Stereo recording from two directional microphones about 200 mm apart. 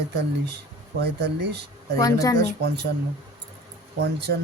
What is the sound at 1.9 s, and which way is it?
Speech, 15° left (ahead or behind).